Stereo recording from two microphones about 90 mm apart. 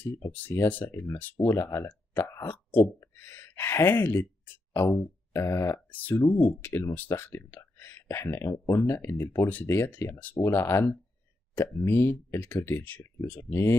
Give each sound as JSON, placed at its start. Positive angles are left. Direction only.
{"t": 0.3, "sound": "speech", "side_deg": 20}
{"t": 1.5, "sound": "speech", "side_deg": 30}
{"t": 3.0, "sound": "speech", "side_deg": 30}
{"t": 4.8, "sound": "a sound", "side_deg": 30}
{"t": 5.9, "sound": "speech", "side_deg": 20}
{"t": 6.2, "sound": "speech", "side_deg": 30}